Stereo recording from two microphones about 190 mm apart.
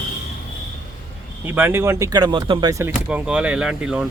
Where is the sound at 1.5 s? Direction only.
10° right (ahead or behind).